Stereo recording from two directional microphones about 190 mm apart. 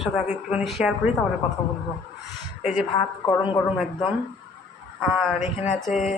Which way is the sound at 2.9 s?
25° left (ahead or behind).